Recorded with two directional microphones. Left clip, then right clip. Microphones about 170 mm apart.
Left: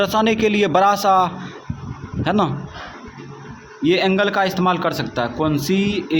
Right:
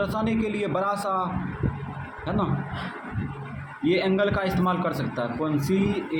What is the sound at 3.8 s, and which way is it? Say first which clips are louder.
A man's voice: left 6 dB; 40° left (ahead or behind).